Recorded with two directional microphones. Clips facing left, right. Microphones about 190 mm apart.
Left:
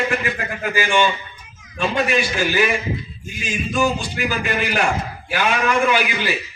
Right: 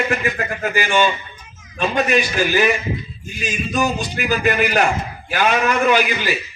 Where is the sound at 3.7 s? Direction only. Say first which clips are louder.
Left 1 dB; 40° right (ahead or behind).